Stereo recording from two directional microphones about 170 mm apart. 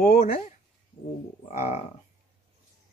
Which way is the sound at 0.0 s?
55° left (ahead or behind).